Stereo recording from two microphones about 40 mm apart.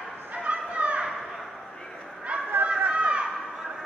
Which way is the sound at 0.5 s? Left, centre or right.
Right.